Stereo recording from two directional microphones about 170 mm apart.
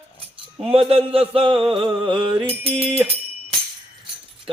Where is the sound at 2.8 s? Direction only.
35° right (ahead or behind).